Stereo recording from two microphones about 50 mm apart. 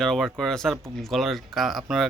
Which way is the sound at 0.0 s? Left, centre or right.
Centre.